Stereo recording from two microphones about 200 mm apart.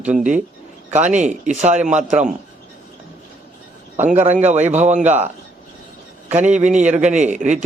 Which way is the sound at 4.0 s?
35° right (ahead or behind).